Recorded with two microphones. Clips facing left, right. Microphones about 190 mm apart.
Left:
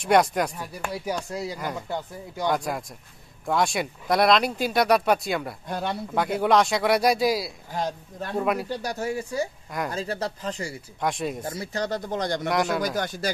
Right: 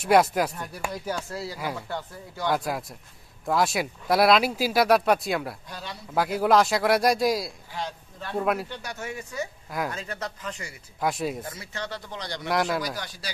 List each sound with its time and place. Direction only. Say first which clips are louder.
0.0 s speech: even; 5° right (ahead or behind)
1.3 s speech: left 2 dB; 20° left (ahead or behind)
2.5 s speech: even; centre (ahead or behind)
5.7 s speech: left 10 dB; 55° left (ahead or behind)
6.1 s speech: even; centre (ahead or behind)
7.7 s speech: left 7 dB; 45° left (ahead or behind)
8.4 s speech: left 1 dB; centre (ahead or behind)
8.6 s speech: left 7 dB; 35° left (ahead or behind)
9.7 s speech: even; centre (ahead or behind)
9.9 s speech: left 6 dB; 35° left (ahead or behind)
11.0 s speech: even; 5° right (ahead or behind)
11.4 s speech: left 7 dB; 40° left (ahead or behind)
12.4 s speech: right 1 dB; centre (ahead or behind)
12.8 s speech: left 7 dB; 50° left (ahead or behind)